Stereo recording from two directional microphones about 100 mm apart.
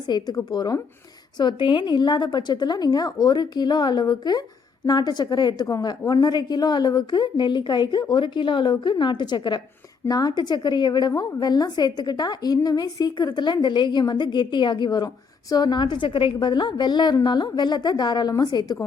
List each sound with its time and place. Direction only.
0.1 s a woman's voice: 45° left (ahead or behind)
1.4 s a woman's voice: 50° left (ahead or behind)